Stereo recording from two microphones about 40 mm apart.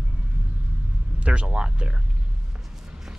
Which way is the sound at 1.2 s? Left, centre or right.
Right.